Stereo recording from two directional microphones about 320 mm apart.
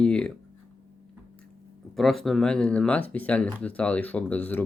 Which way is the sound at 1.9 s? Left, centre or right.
Centre.